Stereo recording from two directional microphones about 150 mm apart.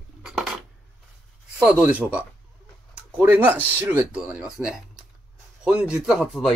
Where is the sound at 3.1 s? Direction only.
10° right (ahead or behind).